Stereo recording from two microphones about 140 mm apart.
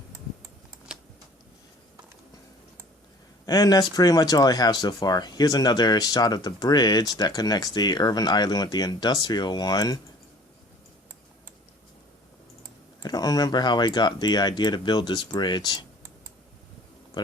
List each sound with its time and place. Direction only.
3.4 s speech: 25° left (ahead or behind)
13.0 s speech: 30° left (ahead or behind)